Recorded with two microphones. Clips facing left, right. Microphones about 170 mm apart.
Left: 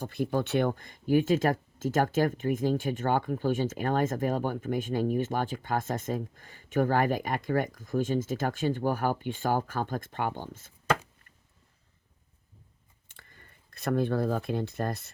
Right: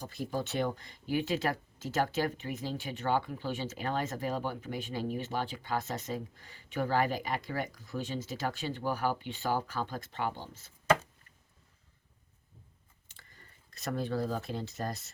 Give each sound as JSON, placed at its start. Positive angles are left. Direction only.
{"t": 0.0, "sound": "speech", "side_deg": 60}
{"t": 13.1, "sound": "speech", "side_deg": 55}